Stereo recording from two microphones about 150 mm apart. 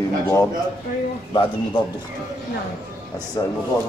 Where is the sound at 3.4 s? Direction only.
25° left (ahead or behind).